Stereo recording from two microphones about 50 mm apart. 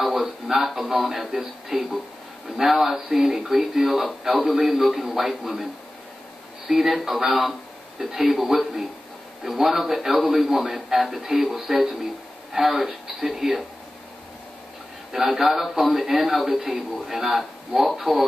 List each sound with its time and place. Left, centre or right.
0.0 s a man's voice: centre
6.7 s a man's voice: centre
15.1 s a man's voice: centre